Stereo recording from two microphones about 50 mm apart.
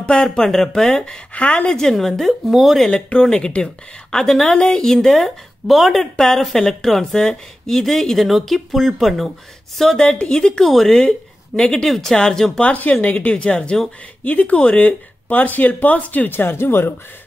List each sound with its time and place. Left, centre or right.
0.0 s a woman's voice: centre
1.3 s speech: left
2.0 s speech: centre
2.9 s a woman's voice: centre
10.0 s a woman's voice: left
10.6 s a woman's voice: centre
12.6 s speech: left
13.3 s speech: centre
14.2 s speech: left
16.3 s speech: left